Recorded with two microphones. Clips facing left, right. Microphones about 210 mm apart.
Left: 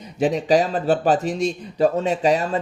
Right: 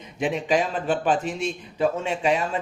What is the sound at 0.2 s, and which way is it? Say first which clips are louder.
Speech: left 5 dB; 40° left (ahead or behind).